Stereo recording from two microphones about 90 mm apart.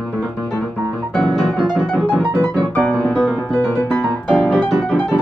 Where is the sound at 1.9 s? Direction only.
15° left (ahead or behind).